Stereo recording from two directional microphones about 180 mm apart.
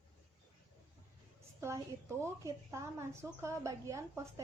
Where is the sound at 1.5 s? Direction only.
15° right (ahead or behind).